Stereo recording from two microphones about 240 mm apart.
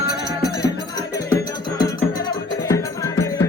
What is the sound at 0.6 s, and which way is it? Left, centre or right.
Music, centre.